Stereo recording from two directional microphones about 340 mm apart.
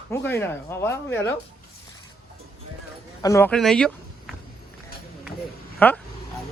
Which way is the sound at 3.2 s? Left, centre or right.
Centre.